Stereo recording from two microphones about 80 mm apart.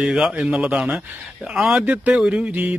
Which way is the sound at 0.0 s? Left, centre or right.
Centre.